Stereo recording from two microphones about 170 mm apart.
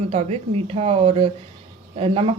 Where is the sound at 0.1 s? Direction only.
40° right (ahead or behind).